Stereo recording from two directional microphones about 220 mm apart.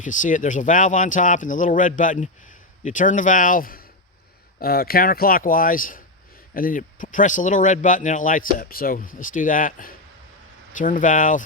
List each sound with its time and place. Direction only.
0.0 s speech: 35° left (ahead or behind)